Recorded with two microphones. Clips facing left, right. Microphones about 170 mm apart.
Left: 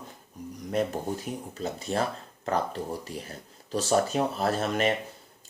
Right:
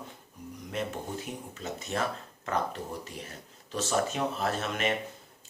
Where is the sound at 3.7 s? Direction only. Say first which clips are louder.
Left 4 dB; 35° left (ahead or behind).